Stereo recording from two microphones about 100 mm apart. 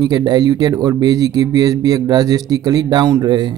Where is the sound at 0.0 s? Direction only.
45° right (ahead or behind).